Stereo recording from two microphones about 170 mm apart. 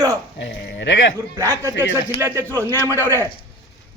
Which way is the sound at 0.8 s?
90° left.